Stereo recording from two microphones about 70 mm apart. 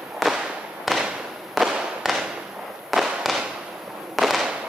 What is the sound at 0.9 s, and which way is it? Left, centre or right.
Fireworks, centre.